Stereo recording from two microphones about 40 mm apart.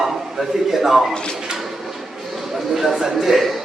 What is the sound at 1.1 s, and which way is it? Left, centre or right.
Speech, left.